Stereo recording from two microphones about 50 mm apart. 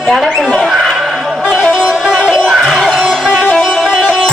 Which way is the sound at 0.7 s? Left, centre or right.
Centre.